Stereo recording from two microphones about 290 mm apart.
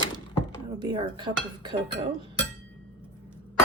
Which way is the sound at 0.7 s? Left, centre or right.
Centre.